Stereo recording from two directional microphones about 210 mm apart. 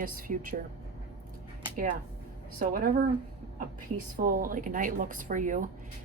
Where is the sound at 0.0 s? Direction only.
40° right (ahead or behind).